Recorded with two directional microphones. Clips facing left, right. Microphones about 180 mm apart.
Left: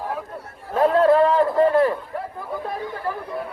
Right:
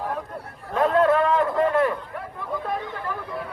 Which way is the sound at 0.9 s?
35° left (ahead or behind).